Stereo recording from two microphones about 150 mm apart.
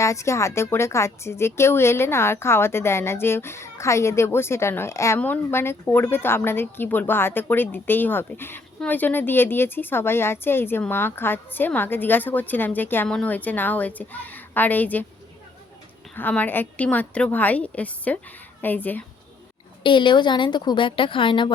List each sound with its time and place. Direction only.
0.0 s speech: 20° left (ahead or behind)
16.1 s speech: 10° left (ahead or behind)
19.8 s a woman's voice: 30° left (ahead or behind)